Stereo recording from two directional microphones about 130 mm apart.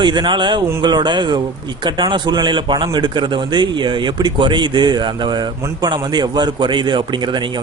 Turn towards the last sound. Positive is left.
turn(degrees=-35)  # may be behind; listen again after turning